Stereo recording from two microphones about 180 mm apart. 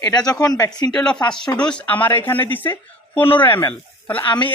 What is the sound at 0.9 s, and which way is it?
Speech, 5° left (ahead or behind).